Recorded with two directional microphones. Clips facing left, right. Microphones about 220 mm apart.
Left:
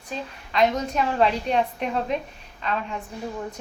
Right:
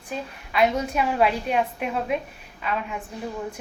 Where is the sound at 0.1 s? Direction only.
10° right (ahead or behind).